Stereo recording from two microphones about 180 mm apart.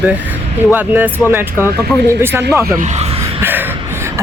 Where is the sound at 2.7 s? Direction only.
40° right (ahead or behind).